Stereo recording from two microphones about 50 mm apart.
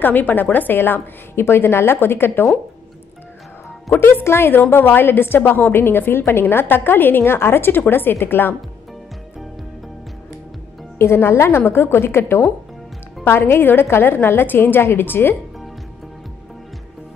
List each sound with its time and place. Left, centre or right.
0.0 s a woman's voice: left
4.2 s a woman's voice: left
4.6 s a woman's voice: left
11.0 s a woman's voice: left